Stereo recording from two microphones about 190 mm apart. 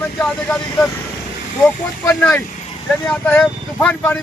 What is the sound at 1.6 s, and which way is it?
Speech, 5° left (ahead or behind).